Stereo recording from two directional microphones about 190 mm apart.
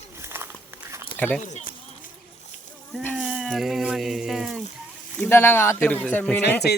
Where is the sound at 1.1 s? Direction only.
10° left (ahead or behind).